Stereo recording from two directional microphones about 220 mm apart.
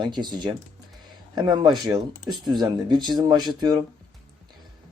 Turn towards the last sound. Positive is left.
turn(degrees=-20)  # may be behind; listen again after turning